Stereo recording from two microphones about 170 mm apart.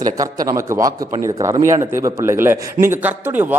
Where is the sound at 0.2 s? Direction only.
20° right (ahead or behind).